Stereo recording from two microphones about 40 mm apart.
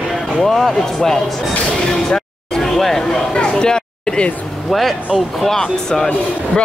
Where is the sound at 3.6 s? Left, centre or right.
Centre.